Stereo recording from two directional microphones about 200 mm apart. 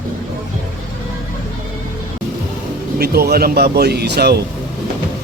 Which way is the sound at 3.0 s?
50° right (ahead or behind).